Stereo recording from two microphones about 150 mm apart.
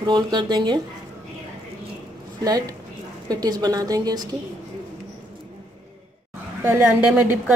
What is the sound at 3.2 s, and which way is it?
A woman's voice, 25° right (ahead or behind).